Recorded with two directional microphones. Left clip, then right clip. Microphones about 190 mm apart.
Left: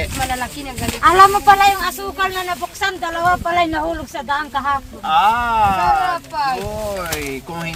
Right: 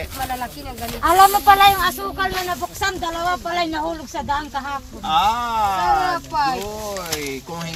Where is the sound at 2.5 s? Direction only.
5° right (ahead or behind).